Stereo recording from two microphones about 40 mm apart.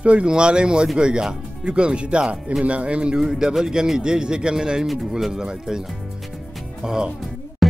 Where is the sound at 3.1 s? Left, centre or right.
Centre.